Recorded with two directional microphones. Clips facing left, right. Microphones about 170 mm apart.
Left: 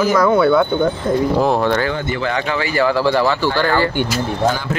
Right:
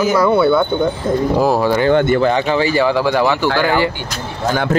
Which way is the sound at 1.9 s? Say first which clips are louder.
Right 10 dB; 55° right (ahead or behind).